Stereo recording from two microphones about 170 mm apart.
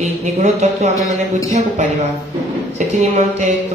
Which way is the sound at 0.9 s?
20° left (ahead or behind).